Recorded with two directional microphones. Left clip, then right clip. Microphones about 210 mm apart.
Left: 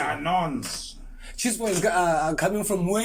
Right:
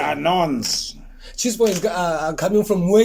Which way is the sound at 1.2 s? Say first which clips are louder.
Right 9 dB; 20° right (ahead or behind).